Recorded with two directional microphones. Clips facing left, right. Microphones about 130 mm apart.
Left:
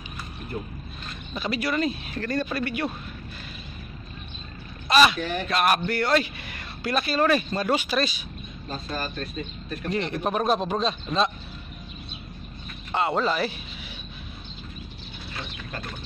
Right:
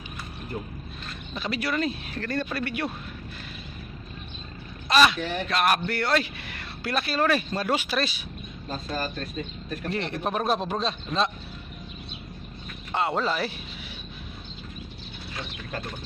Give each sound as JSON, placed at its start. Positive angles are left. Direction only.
{"t": 1.3, "sound": "speech", "side_deg": 5}
{"t": 4.8, "sound": "speech", "side_deg": 5}
{"t": 8.6, "sound": "speech", "side_deg": -40}
{"t": 9.9, "sound": "speech", "side_deg": 0}
{"t": 12.9, "sound": "speech", "side_deg": 0}